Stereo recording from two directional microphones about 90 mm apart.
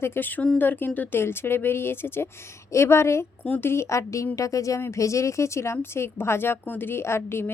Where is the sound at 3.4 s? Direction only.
20° left (ahead or behind).